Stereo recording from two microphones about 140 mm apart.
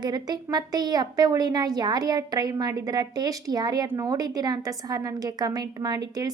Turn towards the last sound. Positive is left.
turn(degrees=-25)  # may be behind; listen again after turning